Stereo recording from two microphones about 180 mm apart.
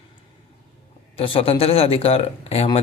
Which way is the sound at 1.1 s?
30° left (ahead or behind).